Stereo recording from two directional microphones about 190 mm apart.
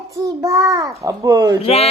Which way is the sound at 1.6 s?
30° left (ahead or behind).